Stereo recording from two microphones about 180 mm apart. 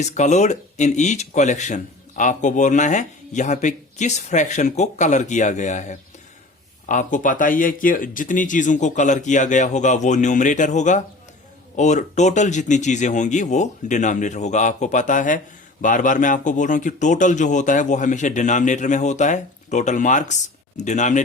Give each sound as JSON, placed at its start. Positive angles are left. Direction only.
{"t": 0.0, "sound": "a man's voice", "side_deg": 40}